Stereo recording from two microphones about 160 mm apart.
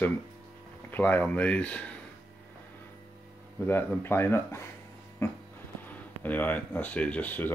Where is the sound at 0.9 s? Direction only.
10° left (ahead or behind).